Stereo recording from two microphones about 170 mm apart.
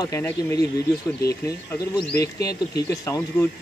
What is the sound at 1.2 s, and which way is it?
Speech, 20° left (ahead or behind).